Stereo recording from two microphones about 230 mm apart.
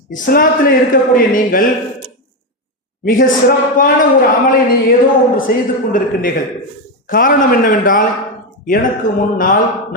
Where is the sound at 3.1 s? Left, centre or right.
Left.